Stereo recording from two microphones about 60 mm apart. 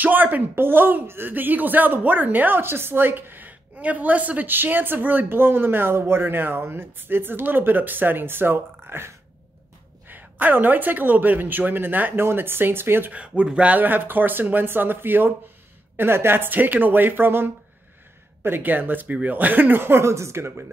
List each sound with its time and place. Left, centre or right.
0.0 s speech: right
13.4 s speech: right